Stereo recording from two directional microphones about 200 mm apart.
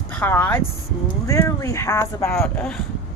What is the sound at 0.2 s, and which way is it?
Speech, 10° left (ahead or behind).